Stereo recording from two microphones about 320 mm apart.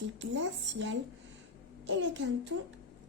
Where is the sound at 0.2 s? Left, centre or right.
Right.